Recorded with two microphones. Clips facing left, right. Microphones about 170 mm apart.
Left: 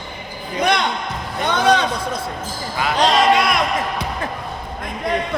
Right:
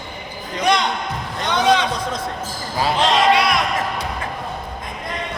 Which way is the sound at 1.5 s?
45° left (ahead or behind).